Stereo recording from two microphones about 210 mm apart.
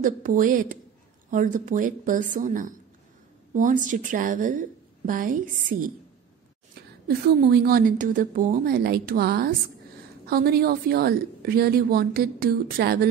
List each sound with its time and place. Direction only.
0.0 s a woman's voice: 40° right (ahead or behind)
7.1 s a woman's voice: 50° right (ahead or behind)